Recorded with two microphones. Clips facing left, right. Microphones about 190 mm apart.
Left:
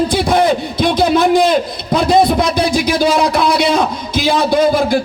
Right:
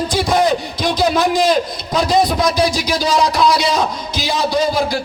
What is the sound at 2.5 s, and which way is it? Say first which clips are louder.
A man's voice: left 3 dB; 55° left (ahead or behind).